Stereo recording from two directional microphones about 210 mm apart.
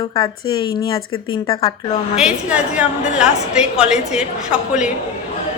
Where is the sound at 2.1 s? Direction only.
5° right (ahead or behind).